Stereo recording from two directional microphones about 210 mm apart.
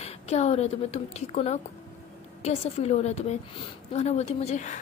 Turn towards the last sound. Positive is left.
turn(degrees=35)  # may be behind; listen again after turning